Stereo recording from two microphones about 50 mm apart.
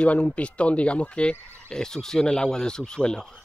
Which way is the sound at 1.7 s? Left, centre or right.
Centre.